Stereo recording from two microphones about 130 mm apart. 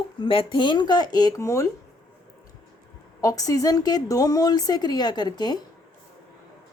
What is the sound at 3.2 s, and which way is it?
A woman's voice, 25° left (ahead or behind).